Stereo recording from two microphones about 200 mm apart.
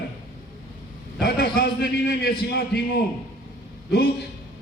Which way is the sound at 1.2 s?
55° left (ahead or behind).